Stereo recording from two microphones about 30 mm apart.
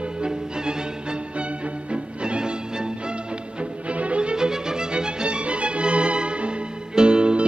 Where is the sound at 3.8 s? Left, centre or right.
Right.